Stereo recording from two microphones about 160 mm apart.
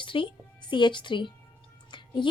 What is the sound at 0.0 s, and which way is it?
Speech, 30° left (ahead or behind).